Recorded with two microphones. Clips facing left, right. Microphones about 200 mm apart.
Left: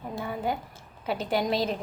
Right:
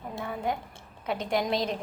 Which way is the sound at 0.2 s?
Centre (ahead or behind).